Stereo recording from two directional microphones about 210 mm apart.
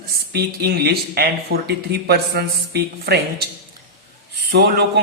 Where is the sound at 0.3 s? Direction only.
50° right (ahead or behind).